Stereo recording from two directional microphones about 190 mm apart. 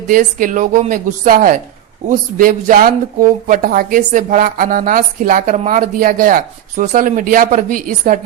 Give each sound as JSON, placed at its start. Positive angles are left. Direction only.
{"t": 0.1, "sound": "speech", "side_deg": -45}